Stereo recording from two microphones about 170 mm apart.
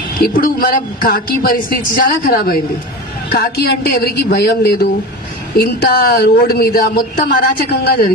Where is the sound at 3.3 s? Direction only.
65° left (ahead or behind).